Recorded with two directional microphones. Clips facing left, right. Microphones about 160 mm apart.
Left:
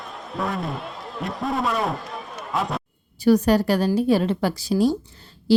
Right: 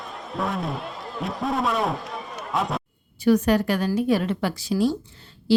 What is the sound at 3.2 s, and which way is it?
A woman's voice, 35° left (ahead or behind).